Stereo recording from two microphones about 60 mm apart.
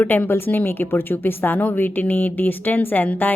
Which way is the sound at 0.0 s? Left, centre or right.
Left.